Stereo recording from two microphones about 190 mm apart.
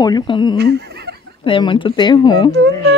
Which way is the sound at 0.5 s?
60° right (ahead or behind).